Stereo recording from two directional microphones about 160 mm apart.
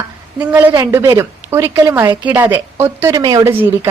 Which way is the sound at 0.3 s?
15° right (ahead or behind).